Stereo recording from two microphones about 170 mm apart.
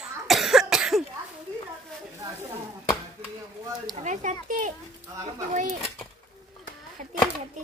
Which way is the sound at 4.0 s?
45° right (ahead or behind).